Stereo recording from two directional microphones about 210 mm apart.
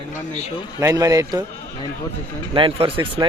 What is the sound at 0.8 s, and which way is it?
Speech, 15° right (ahead or behind).